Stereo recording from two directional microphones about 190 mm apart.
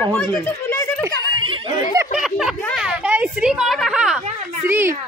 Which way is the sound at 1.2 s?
25° right (ahead or behind).